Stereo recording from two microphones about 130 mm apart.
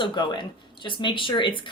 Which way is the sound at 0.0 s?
35° left (ahead or behind).